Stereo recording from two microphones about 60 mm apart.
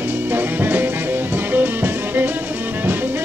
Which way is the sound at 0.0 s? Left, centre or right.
Right.